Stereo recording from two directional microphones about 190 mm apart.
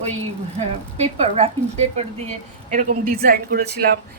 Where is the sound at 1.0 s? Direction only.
35° right (ahead or behind).